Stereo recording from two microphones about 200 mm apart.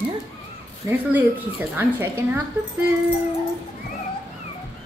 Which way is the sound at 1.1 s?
10° right (ahead or behind).